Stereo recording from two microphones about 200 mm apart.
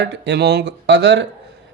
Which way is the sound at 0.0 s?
60° right (ahead or behind).